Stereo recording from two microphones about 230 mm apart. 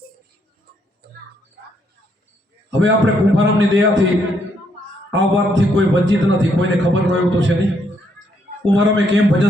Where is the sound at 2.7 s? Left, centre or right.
Right.